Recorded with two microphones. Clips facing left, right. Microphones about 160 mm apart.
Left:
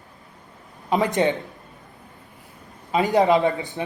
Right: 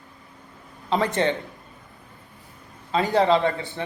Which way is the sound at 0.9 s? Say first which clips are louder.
Left 2 dB; 15° left (ahead or behind).